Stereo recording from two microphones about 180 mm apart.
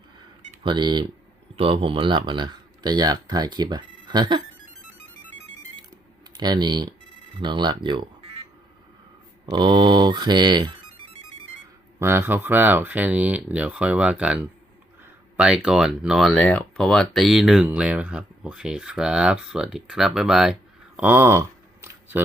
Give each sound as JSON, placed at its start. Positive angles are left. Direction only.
{"t": 0.6, "sound": "speech", "side_deg": -25}
{"t": 6.3, "sound": "speech", "side_deg": -25}
{"t": 9.5, "sound": "speech", "side_deg": -25}
{"t": 11.9, "sound": "speech", "side_deg": -15}